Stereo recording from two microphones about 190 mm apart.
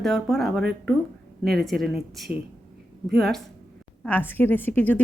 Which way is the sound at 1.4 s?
55° right (ahead or behind).